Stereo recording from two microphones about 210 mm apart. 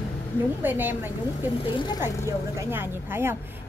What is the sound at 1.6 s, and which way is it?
Speech, 20° left (ahead or behind).